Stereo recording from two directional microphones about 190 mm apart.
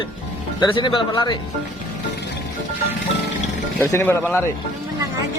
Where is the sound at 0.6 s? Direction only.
25° left (ahead or behind).